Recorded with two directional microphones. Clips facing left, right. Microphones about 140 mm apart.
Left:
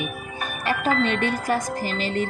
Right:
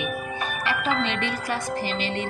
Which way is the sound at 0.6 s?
45° left (ahead or behind).